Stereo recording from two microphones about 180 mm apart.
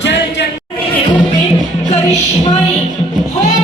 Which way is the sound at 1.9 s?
40° left (ahead or behind).